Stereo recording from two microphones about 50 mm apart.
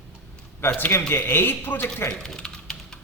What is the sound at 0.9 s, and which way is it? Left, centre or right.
Speech, left.